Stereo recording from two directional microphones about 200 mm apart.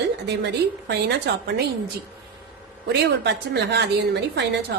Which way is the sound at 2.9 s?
55° right (ahead or behind).